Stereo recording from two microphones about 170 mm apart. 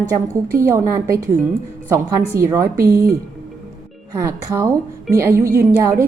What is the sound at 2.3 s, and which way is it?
Speech, 15° right (ahead or behind).